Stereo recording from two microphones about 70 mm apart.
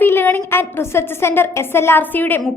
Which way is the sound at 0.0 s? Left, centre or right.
Left.